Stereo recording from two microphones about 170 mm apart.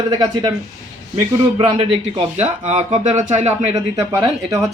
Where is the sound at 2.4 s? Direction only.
40° right (ahead or behind).